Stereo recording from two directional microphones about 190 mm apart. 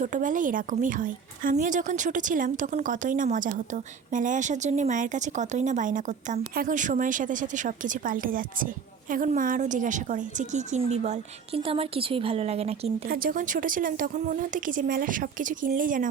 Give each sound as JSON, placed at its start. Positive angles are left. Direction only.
{"t": 0.0, "sound": "a woman's voice", "side_deg": -45}
{"t": 13.1, "sound": "a woman's voice", "side_deg": -50}